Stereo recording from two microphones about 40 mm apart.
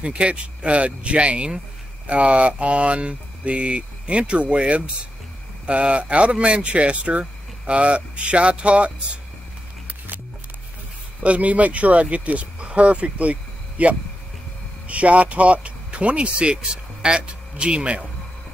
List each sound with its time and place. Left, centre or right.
0.0 s speech: right
11.2 s a man's voice: right